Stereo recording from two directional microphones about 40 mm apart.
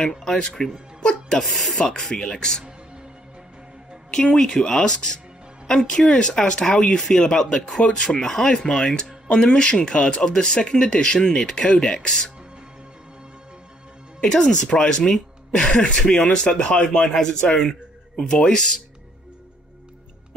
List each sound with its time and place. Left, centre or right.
0.6 s speech: centre
4.1 s speech: centre
8.2 s speech: centre
8.6 s speech: centre
14.2 s speech: centre
17.5 s speech: centre